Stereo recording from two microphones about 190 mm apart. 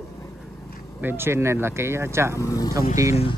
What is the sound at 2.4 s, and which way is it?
Speech, 20° left (ahead or behind).